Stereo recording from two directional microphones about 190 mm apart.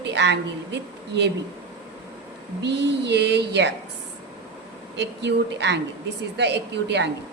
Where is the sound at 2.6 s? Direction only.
65° right (ahead or behind).